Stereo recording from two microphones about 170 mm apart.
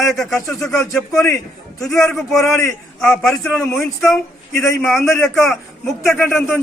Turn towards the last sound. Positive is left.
turn(degrees=0)  # may be behind; listen again after turning